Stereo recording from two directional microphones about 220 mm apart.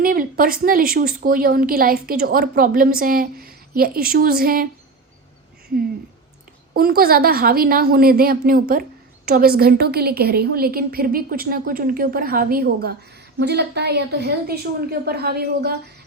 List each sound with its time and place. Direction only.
0.0 s a woman's voice: 40° right (ahead or behind)
6.7 s a woman's voice: 40° right (ahead or behind)